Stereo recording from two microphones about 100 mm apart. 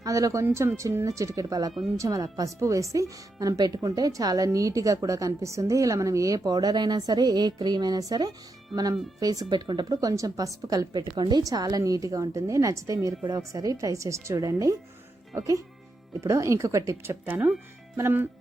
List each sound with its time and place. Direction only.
0.0 s speech: 35° right (ahead or behind)